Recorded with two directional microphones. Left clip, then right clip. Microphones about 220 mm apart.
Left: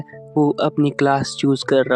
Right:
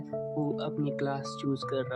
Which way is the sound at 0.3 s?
45° left (ahead or behind).